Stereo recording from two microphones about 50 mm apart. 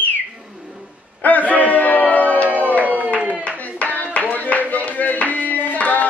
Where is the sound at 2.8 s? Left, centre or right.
Right.